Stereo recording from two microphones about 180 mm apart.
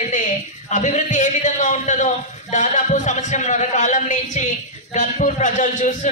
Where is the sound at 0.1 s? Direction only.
45° left (ahead or behind).